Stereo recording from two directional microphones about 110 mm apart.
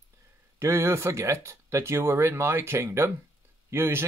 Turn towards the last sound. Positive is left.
turn(degrees=-20)  # may be behind; listen again after turning